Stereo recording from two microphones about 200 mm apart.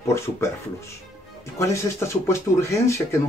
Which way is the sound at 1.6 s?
15° left (ahead or behind).